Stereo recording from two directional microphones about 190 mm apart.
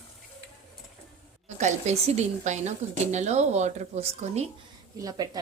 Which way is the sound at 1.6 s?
40° right (ahead or behind).